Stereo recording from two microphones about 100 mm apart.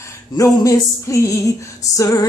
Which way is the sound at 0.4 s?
30° left (ahead or behind).